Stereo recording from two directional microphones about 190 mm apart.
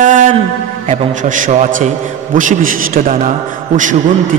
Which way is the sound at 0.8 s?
40° right (ahead or behind).